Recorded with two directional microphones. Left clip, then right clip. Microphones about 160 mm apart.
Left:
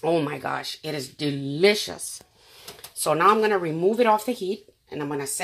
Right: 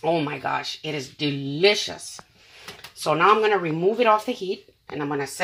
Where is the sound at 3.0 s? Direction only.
20° left (ahead or behind).